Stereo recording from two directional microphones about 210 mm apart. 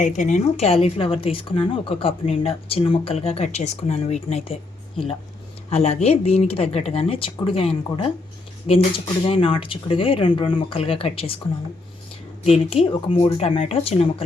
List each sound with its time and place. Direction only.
0.0 s speech: 35° left (ahead or behind)
5.7 s speech: 30° left (ahead or behind)
12.5 s speech: 30° left (ahead or behind)